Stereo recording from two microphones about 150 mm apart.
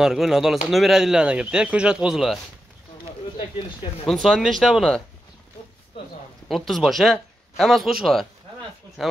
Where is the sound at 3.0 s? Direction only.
35° left (ahead or behind).